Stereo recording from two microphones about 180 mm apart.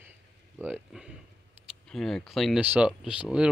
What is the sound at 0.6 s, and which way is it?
Speech, 5° right (ahead or behind).